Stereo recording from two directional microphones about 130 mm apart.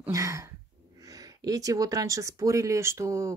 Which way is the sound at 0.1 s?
25° right (ahead or behind).